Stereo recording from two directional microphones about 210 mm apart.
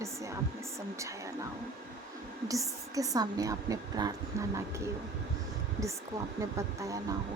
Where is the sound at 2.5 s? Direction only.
15° right (ahead or behind).